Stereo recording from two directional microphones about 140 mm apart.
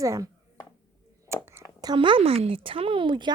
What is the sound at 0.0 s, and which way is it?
Speech, 20° right (ahead or behind).